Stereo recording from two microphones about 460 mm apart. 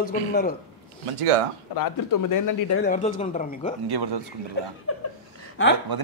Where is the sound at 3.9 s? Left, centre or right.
Right.